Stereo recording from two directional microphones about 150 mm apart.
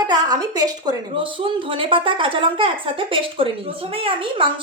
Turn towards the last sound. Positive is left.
turn(degrees=-35)  # may be behind; listen again after turning